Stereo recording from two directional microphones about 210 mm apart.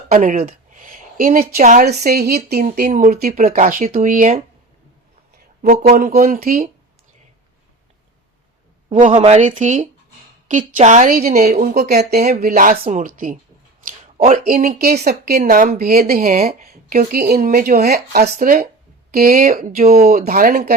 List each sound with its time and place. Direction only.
0.1 s speech: 40° right (ahead or behind)
5.6 s speech: 40° right (ahead or behind)
8.9 s a woman's voice: 35° right (ahead or behind)